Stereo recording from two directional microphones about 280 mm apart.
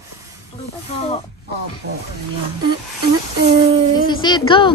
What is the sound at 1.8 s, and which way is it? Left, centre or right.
Speech, right.